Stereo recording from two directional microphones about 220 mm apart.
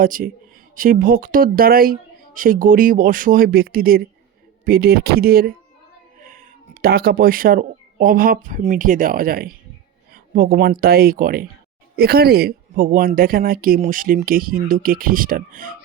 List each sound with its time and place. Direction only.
0.0 s speech: 40° right (ahead or behind)
6.8 s speech: 45° right (ahead or behind)